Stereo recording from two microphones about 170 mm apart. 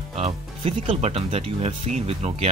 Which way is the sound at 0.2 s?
35° right (ahead or behind).